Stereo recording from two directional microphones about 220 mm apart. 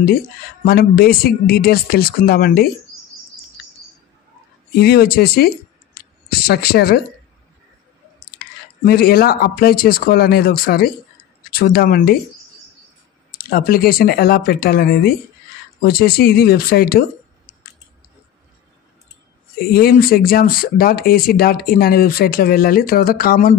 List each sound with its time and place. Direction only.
0.7 s speech: 45° left (ahead or behind)
4.7 s speech: 45° left (ahead or behind)
8.8 s speech: 45° left (ahead or behind)
13.4 s speech: 40° left (ahead or behind)
19.6 s speech: 45° left (ahead or behind)